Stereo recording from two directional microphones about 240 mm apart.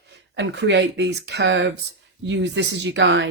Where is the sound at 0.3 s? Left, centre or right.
Right.